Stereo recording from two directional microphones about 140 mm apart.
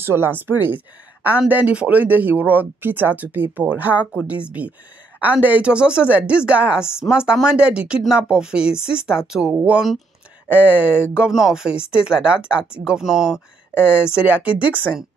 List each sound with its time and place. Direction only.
0.0 s speech: 15° right (ahead or behind)